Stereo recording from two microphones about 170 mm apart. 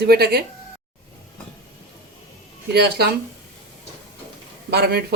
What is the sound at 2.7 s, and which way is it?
Speech, 70° right (ahead or behind).